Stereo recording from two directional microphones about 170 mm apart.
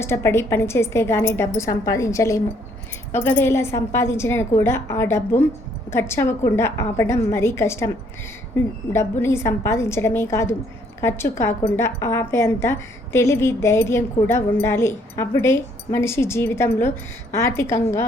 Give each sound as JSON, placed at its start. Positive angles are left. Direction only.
{"t": 0.0, "sound": "a woman's voice", "side_deg": 15}